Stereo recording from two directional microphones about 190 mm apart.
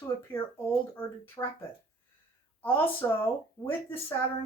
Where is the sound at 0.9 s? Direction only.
10° left (ahead or behind).